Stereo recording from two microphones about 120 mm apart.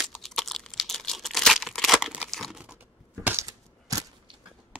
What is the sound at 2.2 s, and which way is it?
Crunch, centre (ahead or behind).